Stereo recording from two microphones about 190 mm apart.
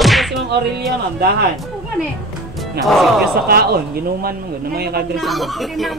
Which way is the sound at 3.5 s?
55° right (ahead or behind).